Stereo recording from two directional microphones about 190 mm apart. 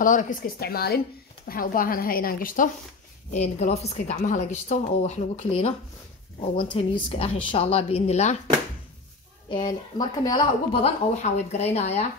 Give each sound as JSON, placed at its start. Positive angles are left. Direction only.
{"t": 0.0, "sound": "a woman's voice", "side_deg": 45}
{"t": 3.3, "sound": "a woman's voice", "side_deg": 35}
{"t": 9.5, "sound": "a woman's voice", "side_deg": 25}